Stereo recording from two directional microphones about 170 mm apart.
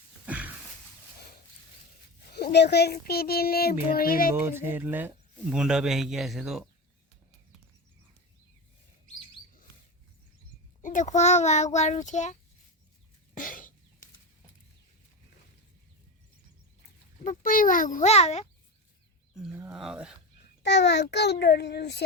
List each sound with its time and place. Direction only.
0.3 s a sound: 10° right (ahead or behind)
2.3 s a child's voice: 75° left (ahead or behind); by 4.3 s 60° left (ahead or behind)
4.5 s speech: 15° right (ahead or behind)
10.8 s a child's voice: 45° left (ahead or behind)
13.3 s chicken: 50° left (ahead or behind)
17.2 s a child's voice: 55° left (ahead or behind)
19.4 s speech: 10° right (ahead or behind)
20.6 s a child's voice: 90° left